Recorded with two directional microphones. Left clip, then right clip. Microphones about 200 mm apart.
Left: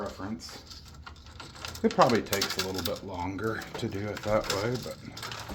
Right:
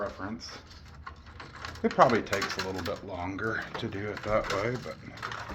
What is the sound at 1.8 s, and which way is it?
Speech, 60° left (ahead or behind).